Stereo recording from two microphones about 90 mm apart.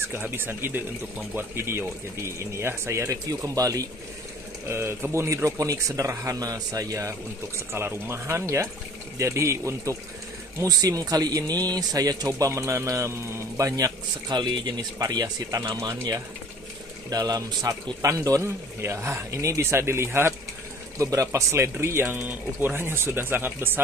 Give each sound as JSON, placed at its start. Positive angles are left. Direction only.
{"t": 0.1, "sound": "a man's voice", "side_deg": -25}
{"t": 4.6, "sound": "a man's voice", "side_deg": -30}
{"t": 7.7, "sound": "a man's voice", "side_deg": -30}
{"t": 14.3, "sound": "speech", "side_deg": -55}
{"t": 17.1, "sound": "a man's voice", "side_deg": -45}